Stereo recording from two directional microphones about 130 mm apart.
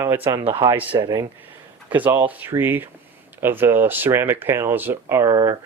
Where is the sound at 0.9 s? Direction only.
30° right (ahead or behind).